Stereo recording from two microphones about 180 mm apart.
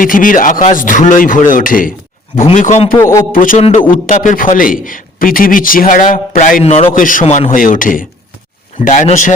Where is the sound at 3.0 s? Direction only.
15° left (ahead or behind).